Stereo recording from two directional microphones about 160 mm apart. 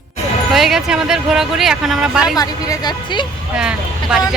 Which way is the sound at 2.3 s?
25° left (ahead or behind).